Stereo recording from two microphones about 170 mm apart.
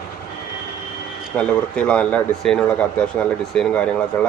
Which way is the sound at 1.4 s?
5° left (ahead or behind).